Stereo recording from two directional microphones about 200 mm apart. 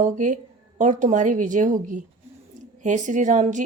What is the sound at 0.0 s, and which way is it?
A woman's voice, 40° right (ahead or behind).